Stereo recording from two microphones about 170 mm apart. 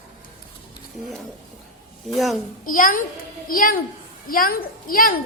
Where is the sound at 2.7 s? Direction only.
55° left (ahead or behind).